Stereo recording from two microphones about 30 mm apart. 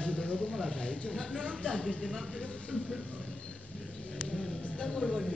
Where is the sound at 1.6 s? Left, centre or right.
Left.